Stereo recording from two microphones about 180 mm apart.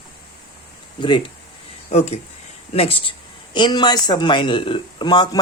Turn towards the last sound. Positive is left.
turn(degrees=25)  # may be behind; listen again after turning